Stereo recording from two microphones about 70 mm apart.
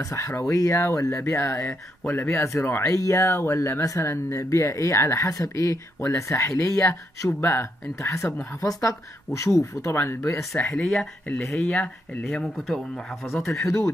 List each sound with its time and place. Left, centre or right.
0.0 s speech: left
3.8 s speech: left
7.3 s speech: left
8.5 s a woman's voice: left
10.6 s speech: centre
11.7 s speech: left
12.6 s a man's voice: centre
13.5 s speech: left